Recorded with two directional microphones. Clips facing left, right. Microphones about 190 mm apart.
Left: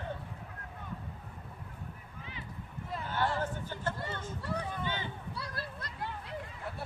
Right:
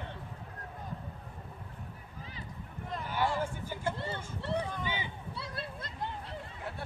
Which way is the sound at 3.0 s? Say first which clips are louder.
Right 1 dB; 10° right (ahead or behind).